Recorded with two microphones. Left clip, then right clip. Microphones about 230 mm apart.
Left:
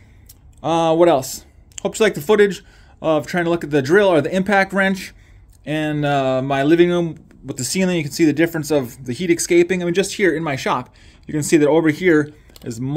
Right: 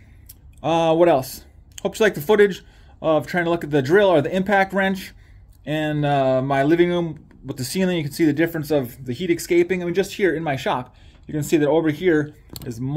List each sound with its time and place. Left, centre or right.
0.6 s speech: centre; by 12.9 s left